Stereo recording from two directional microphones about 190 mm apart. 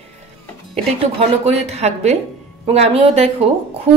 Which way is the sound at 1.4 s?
35° right (ahead or behind).